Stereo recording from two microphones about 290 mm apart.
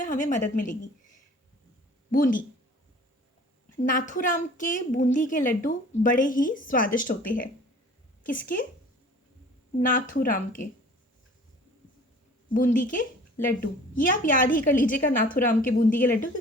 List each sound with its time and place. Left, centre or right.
0.0 s a woman's voice: left
2.1 s a woman's voice: left
3.8 s a woman's voice: left
8.2 s a woman's voice: left
9.8 s a woman's voice: left
12.5 s a woman's voice: left